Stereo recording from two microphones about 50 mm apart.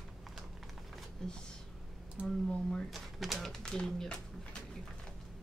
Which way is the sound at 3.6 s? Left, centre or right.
Centre.